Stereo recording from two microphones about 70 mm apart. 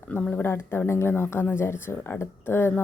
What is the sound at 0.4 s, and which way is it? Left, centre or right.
Speech, left.